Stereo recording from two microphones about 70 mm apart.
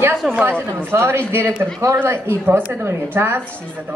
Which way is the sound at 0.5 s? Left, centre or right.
Right.